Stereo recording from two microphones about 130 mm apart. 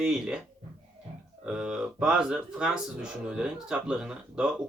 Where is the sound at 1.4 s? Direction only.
5° right (ahead or behind).